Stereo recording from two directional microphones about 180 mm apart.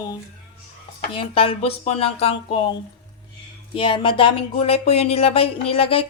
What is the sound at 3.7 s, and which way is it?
Speech, 30° left (ahead or behind).